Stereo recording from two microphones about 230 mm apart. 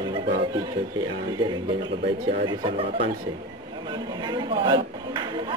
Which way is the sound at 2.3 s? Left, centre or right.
Right.